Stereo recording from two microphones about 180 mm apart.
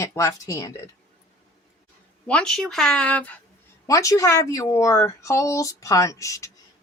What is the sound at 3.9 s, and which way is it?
A woman's voice, 20° left (ahead or behind).